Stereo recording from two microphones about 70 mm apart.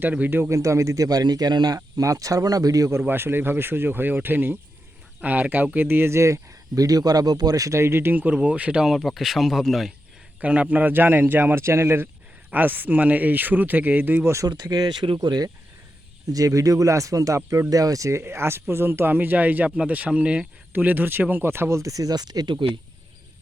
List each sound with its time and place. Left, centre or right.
0.0 s speech: right
0.5 s speech: right
3.1 s speech: right; by 8.9 s centre
9.0 s speech: centre
10.4 s speech: centre
11.6 s speech: right
12.5 s speech: right
14.4 s speech: right
16.2 s speech: right; by 20.5 s centre
20.7 s speech: right